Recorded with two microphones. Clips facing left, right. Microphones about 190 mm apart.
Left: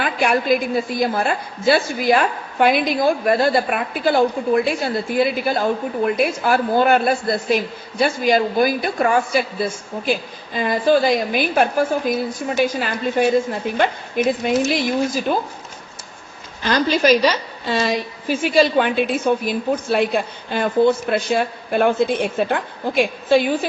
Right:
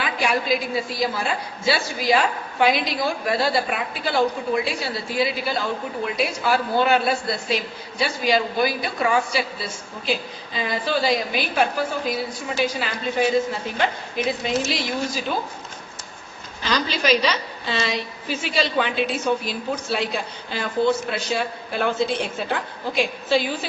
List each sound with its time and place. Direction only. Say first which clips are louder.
0.0 s a woman's voice: left 4 dB; 55° left (ahead or behind)
16.6 s a woman's voice: left 6 dB; 50° left (ahead or behind)